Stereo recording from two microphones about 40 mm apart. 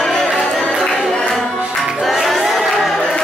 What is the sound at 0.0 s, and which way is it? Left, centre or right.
Music, centre.